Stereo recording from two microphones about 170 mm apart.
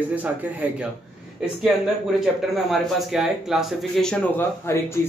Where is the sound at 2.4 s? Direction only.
Centre (ahead or behind).